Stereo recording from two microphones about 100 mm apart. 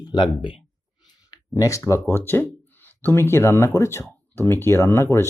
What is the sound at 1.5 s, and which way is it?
Speech, 30° left (ahead or behind).